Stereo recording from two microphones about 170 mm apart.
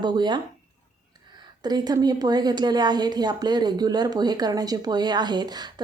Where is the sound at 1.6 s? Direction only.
25° right (ahead or behind).